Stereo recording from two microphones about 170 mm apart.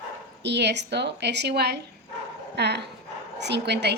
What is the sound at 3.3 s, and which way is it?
Speech, 90° right.